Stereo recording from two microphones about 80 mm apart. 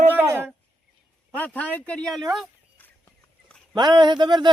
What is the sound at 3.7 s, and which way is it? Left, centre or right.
Speech, right.